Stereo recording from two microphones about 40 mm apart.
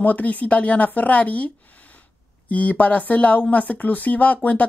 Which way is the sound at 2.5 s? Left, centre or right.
Left.